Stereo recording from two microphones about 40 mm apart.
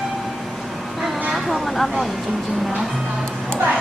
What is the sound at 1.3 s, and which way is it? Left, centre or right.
Speech, centre.